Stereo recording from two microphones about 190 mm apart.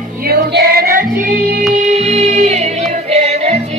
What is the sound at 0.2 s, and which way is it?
Music, 55° right (ahead or behind).